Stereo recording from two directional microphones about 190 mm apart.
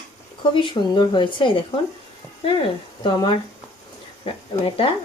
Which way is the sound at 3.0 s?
25° left (ahead or behind).